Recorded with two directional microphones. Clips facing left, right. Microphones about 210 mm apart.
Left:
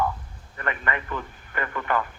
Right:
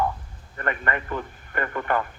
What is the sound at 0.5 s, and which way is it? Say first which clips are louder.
A woman's voice: right 2 dB; 45° right (ahead or behind).